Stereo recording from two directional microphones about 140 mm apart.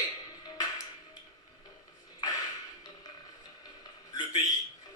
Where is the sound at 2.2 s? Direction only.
25° left (ahead or behind).